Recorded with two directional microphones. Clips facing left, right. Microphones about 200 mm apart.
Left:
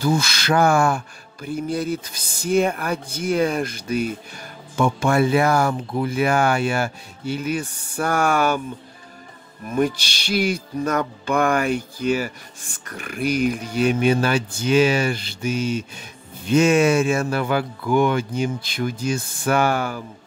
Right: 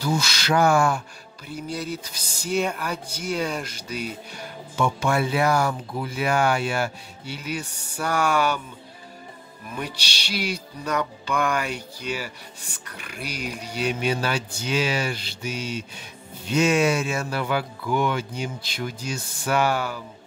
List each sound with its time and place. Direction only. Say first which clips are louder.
0.0 s speech: left 4 dB; 55° left (ahead or behind)
9.7 s speech: left 12 dB; 45° left (ahead or behind)